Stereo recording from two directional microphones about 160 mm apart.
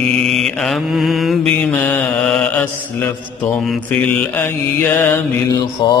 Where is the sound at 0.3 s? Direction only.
Centre (ahead or behind).